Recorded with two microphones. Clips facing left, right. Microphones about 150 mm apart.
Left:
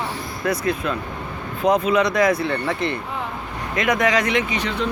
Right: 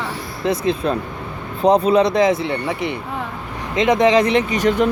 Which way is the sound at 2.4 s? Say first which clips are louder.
Right 1 dB; 15° right (ahead or behind).